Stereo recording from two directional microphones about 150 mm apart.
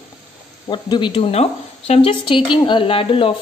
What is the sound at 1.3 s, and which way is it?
A woman's voice, 45° left (ahead or behind).